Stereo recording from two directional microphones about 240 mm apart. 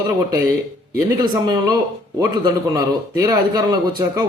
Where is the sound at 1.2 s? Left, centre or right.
Centre.